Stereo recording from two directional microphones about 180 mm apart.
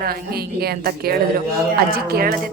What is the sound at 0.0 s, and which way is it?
A woman's voice, 60° right (ahead or behind).